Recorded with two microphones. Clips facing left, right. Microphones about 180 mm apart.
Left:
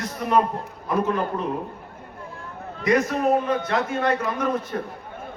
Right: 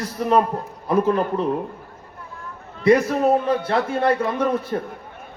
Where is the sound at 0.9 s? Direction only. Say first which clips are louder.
Right 4 dB; 30° right (ahead or behind).